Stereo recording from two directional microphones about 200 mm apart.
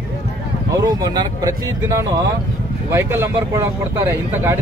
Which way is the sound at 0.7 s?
20° right (ahead or behind).